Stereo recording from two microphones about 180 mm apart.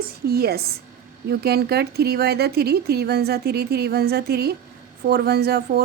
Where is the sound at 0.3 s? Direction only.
60° right (ahead or behind).